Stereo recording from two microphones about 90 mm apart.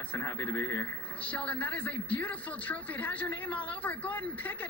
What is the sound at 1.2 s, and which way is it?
A man's voice, 15° left (ahead or behind).